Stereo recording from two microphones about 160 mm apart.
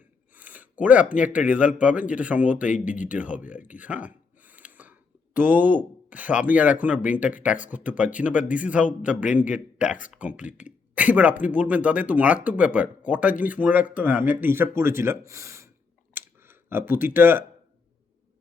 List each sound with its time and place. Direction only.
0.3 s a sound: 10° right (ahead or behind)
1.2 s speech: 10° right (ahead or behind)
2.6 s speech: 55° left (ahead or behind)
3.0 s speech: 10° right (ahead or behind)